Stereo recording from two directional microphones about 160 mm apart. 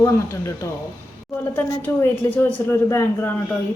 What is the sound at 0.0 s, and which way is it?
Speech, 20° left (ahead or behind).